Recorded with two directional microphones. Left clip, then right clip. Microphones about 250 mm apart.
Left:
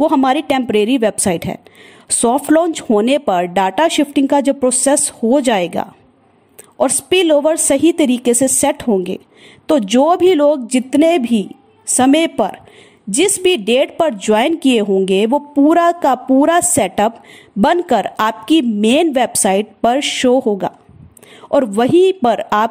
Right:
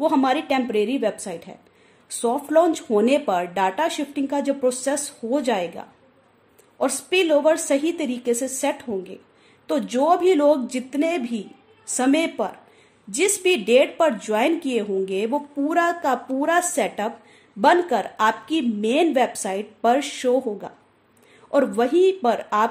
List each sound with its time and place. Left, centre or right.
0.0 s a woman's voice: left